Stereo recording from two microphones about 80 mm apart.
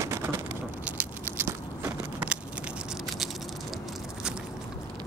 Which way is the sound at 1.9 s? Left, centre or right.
Centre.